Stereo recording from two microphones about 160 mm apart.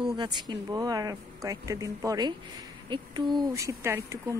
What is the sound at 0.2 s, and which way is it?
A woman's voice, 25° right (ahead or behind).